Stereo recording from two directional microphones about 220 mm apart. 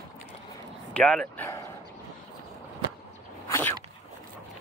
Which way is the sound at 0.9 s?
5° left (ahead or behind).